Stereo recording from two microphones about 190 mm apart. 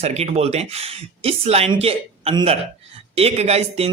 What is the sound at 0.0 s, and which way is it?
A man's voice, 35° right (ahead or behind).